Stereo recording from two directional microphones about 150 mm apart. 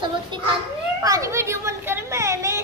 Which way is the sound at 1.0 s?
20° right (ahead or behind).